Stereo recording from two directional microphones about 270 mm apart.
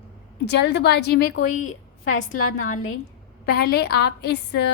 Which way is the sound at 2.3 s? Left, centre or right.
Left.